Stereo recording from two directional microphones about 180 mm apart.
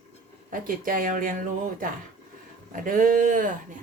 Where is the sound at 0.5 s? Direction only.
50° right (ahead or behind).